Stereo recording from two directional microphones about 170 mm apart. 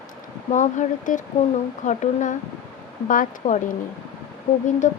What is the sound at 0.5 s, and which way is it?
Speech, 50° left (ahead or behind).